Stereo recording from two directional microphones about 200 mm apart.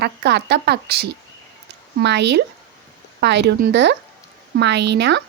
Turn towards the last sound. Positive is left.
turn(degrees=-60)  # may be behind; listen again after turning